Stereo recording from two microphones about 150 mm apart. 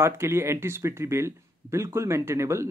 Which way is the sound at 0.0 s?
15° right (ahead or behind).